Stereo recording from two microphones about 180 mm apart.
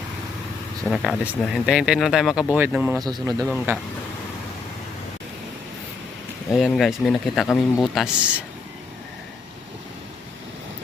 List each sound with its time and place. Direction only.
0.9 s speech: centre (ahead or behind)
3.0 s a man's voice: 20° right (ahead or behind)
6.5 s speech: centre (ahead or behind)